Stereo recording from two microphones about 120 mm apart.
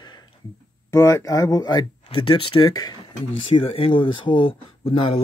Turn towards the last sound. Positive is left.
turn(degrees=55)  # may be behind; listen again after turning